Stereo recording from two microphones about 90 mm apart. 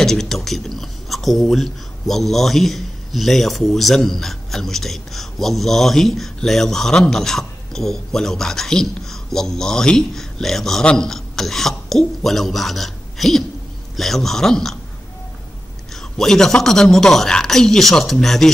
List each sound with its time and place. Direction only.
0.0 s speech: 5° left (ahead or behind)
15.9 s speech: 5° left (ahead or behind)